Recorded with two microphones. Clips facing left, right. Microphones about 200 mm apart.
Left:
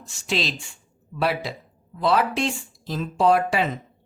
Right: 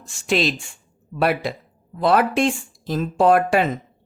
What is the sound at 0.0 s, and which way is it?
Speech, 50° right (ahead or behind).